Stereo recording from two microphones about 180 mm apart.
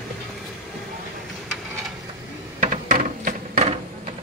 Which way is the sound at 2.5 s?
45° right (ahead or behind).